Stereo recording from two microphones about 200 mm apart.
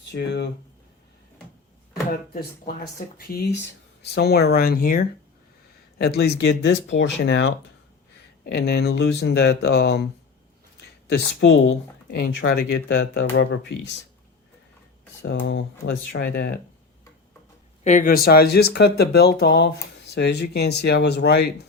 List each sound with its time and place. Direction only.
0.0 s speech: 60° left (ahead or behind)
2.0 s speech: 50° left (ahead or behind)
11.1 s speech: 70° left (ahead or behind)
12.4 s speech: 90° left
13.3 s speech: 55° left (ahead or behind)
15.2 s speech: 70° left (ahead or behind)
17.8 s speech: 40° left (ahead or behind)